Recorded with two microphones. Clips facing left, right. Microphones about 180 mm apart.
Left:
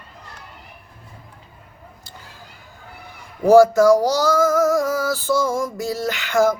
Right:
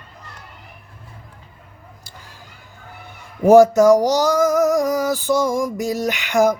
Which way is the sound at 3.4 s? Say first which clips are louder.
Right 1 dB; 20° right (ahead or behind).